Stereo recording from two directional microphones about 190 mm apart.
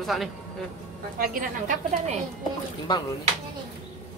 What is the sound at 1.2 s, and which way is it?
Speech, 45° right (ahead or behind).